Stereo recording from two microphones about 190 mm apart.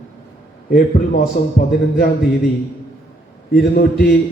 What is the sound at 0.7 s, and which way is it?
A man's voice, 45° left (ahead or behind).